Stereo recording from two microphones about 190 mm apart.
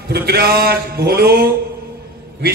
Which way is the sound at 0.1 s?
55° right (ahead or behind).